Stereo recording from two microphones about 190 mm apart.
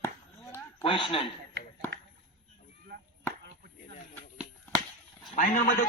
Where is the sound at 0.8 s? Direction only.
25° left (ahead or behind).